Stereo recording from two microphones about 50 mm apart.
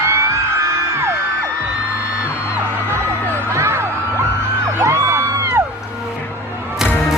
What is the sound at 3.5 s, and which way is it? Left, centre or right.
Music, right.